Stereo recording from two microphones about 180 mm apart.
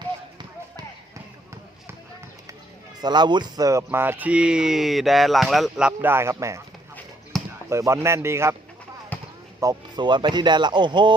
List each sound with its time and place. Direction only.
3.0 s speech: 25° right (ahead or behind)
7.3 s basketball bounce: centre (ahead or behind)
7.7 s speech: 15° right (ahead or behind)
9.1 s basketball bounce: 10° left (ahead or behind)
9.6 s speech: 20° right (ahead or behind)